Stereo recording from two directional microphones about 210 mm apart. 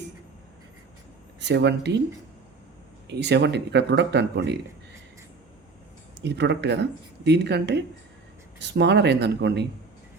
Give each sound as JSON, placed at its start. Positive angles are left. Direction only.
{"t": 1.4, "sound": "speech", "side_deg": -55}
{"t": 3.1, "sound": "speech", "side_deg": -55}
{"t": 6.2, "sound": "speech", "side_deg": -55}